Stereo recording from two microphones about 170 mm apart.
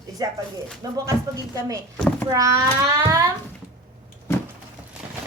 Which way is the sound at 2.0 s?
10° left (ahead or behind).